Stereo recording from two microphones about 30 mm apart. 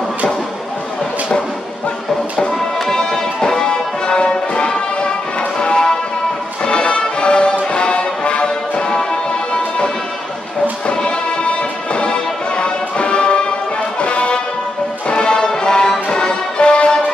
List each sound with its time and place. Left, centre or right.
2.4 s music: left
6.6 s music: left
10.9 s music: left